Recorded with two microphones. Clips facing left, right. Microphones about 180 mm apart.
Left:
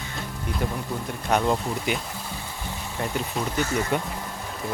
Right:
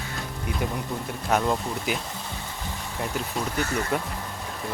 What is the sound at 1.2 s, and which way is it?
Speech, centre (ahead or behind).